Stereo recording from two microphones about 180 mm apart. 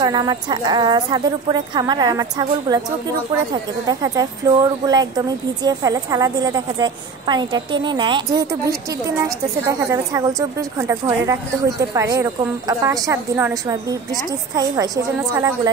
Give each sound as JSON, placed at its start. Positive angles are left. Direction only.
{"t": 0.0, "sound": "speech", "side_deg": -20}
{"t": 4.0, "sound": "a woman's voice", "side_deg": -20}
{"t": 14.5, "sound": "speech", "side_deg": -20}